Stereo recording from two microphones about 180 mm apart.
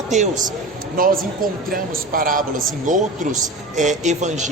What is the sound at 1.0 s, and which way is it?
A woman's voice, 50° right (ahead or behind).